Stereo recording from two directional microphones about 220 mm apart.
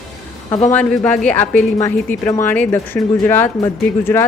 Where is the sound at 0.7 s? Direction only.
5° left (ahead or behind).